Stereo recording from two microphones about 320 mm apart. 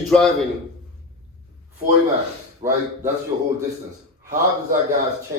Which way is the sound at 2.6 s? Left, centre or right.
Right.